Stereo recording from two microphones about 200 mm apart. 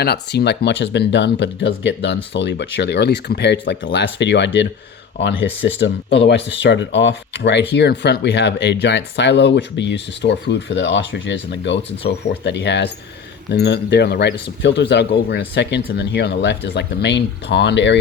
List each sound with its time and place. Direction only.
0.0 s speech: 55° left (ahead or behind)